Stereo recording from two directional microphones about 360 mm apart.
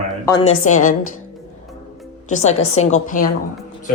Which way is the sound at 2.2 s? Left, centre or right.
Centre.